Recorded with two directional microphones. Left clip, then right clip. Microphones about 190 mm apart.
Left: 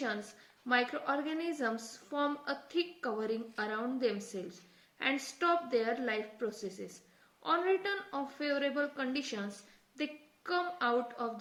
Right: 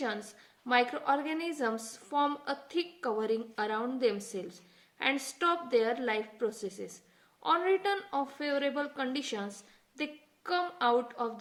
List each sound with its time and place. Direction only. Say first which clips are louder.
0.7 s a woman's voice: right 4 dB; 30° right (ahead or behind)